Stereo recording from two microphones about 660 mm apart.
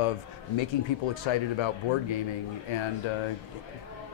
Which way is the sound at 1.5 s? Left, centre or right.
Left.